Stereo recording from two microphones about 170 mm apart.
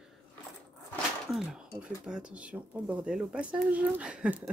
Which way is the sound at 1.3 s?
Centre (ahead or behind).